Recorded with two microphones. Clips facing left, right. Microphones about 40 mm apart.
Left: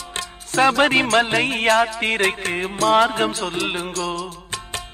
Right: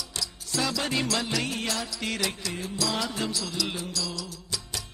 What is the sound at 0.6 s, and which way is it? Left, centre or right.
Music, left.